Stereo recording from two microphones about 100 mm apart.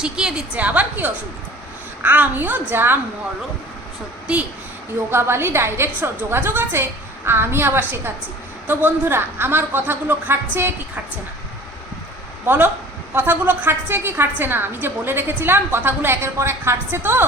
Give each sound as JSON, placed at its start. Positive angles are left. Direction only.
{"t": 0.0, "sound": "a woman's voice", "side_deg": -10}
{"t": 5.1, "sound": "a woman's voice", "side_deg": -25}
{"t": 12.5, "sound": "a woman's voice", "side_deg": -20}